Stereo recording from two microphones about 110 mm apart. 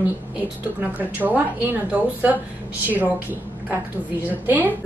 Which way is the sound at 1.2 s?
15° right (ahead or behind).